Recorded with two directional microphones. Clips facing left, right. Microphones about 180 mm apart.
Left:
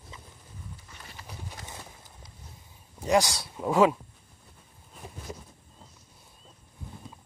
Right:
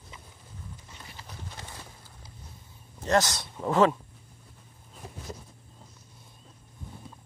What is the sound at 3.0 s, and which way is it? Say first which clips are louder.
Speech: left 1 dB; 10° left (ahead or behind).